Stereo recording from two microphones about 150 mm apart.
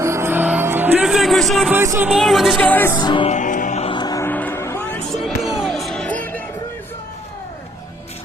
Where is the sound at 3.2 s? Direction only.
55° left (ahead or behind).